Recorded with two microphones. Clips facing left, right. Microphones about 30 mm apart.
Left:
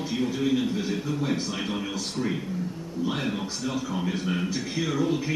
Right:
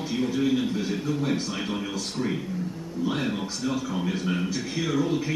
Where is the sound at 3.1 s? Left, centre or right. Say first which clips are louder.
Right 2 dB; centre.